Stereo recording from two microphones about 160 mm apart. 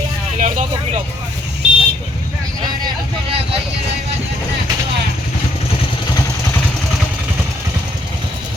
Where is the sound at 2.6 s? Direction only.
25° right (ahead or behind).